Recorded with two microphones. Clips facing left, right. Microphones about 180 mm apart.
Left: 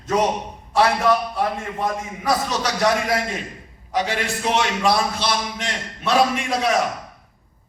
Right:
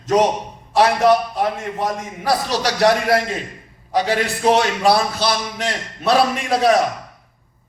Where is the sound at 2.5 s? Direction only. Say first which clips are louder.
Right 8 dB; 70° right (ahead or behind).